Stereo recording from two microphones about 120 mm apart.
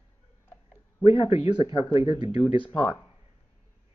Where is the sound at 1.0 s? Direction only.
50° left (ahead or behind).